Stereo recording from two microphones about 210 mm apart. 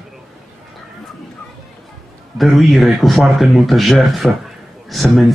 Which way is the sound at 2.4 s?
Centre (ahead or behind).